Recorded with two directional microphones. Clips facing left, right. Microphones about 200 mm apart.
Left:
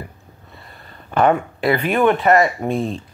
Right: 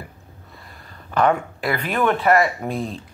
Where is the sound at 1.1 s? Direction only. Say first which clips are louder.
Left 3 dB; 25° left (ahead or behind).